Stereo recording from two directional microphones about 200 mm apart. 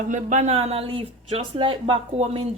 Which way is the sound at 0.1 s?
40° right (ahead or behind).